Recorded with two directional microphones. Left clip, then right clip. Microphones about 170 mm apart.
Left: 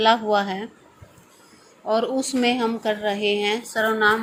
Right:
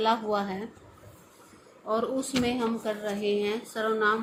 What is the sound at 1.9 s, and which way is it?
A woman's voice, 25° left (ahead or behind).